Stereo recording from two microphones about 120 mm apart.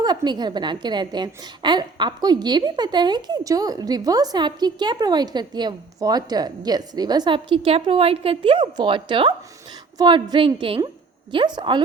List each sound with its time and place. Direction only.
0.0 s a woman's voice: 35° right (ahead or behind)